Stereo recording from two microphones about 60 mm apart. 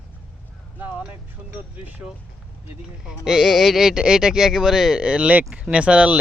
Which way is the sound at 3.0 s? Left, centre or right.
Centre.